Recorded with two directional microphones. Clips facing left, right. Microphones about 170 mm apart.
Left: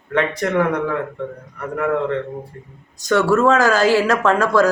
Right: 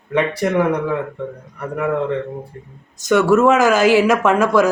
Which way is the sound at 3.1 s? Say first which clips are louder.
Right 2 dB; 15° right (ahead or behind).